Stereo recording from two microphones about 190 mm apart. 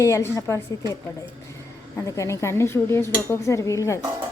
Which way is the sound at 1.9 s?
15° left (ahead or behind).